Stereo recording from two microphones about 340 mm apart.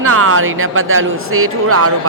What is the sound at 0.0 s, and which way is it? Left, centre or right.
A woman's voice, right.